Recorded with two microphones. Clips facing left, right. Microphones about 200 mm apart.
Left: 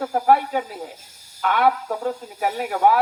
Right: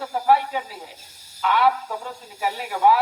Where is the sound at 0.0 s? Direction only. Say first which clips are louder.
Left 2 dB; 50° left (ahead or behind).